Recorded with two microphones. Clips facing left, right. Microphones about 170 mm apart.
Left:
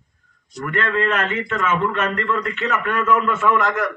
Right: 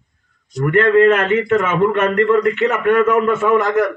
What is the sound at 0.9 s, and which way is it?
A man's voice, 55° right (ahead or behind).